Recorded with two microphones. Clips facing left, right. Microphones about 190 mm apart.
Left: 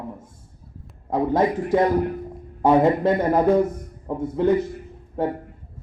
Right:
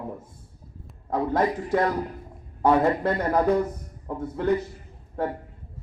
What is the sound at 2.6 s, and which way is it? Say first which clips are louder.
A man's voice: left 4 dB; 20° left (ahead or behind).